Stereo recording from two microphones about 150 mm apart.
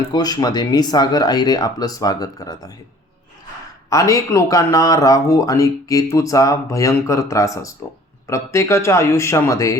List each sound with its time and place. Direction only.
0.1 s speech: 25° left (ahead or behind)
3.8 s speech: 20° left (ahead or behind)